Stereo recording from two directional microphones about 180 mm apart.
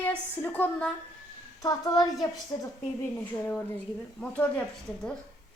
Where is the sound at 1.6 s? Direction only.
20° left (ahead or behind).